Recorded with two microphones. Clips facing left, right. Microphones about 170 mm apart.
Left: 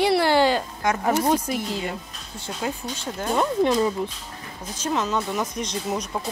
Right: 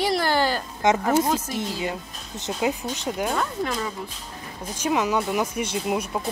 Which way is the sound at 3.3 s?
25° left (ahead or behind).